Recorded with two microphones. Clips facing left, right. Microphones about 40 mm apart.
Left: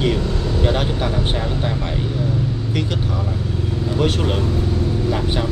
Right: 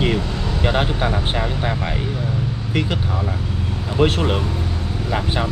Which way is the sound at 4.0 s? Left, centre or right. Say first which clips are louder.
Right 3 dB; right.